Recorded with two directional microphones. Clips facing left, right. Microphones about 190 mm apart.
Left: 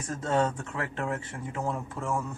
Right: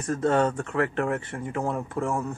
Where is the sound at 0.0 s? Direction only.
60° right (ahead or behind).